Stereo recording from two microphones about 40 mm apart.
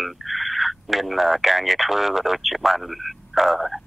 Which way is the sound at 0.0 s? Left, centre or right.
Centre.